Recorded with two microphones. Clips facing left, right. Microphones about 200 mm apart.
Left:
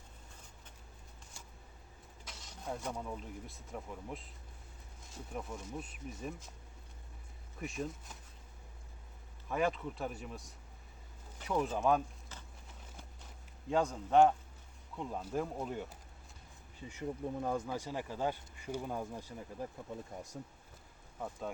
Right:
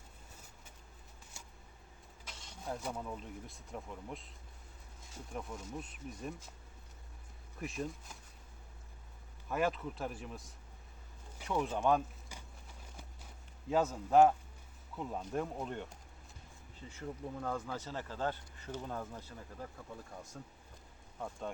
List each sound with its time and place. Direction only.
2.3 s speech: 5° left (ahead or behind)
7.6 s speech: centre (ahead or behind)
9.5 s speech: centre (ahead or behind)
12.3 s a sound: 10° right (ahead or behind)
13.7 s speech: 5° right (ahead or behind)
16.8 s speech: 15° left (ahead or behind)
21.2 s speech: 5° left (ahead or behind)